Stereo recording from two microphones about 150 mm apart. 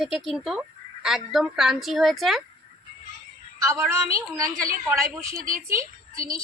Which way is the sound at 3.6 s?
20° right (ahead or behind).